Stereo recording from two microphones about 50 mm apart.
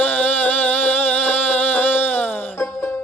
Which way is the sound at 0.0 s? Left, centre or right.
Left.